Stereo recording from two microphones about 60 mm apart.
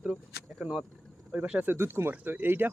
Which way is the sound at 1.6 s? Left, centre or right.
Right.